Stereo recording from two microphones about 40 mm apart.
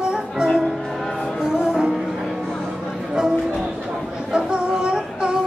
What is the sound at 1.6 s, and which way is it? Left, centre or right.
Music, right.